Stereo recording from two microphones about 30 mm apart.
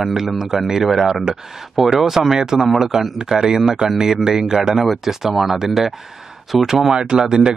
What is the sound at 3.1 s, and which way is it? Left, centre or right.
Speech, centre.